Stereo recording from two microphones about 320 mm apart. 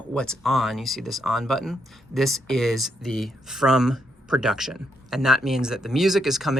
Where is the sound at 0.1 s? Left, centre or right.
Centre.